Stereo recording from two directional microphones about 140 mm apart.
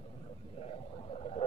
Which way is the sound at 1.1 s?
50° left (ahead or behind).